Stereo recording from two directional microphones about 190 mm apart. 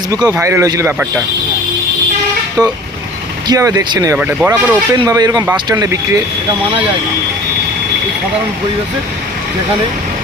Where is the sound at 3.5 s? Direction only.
20° right (ahead or behind).